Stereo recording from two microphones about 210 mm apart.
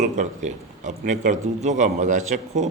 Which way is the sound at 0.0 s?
35° right (ahead or behind).